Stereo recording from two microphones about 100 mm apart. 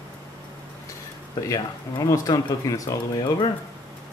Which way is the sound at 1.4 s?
35° left (ahead or behind).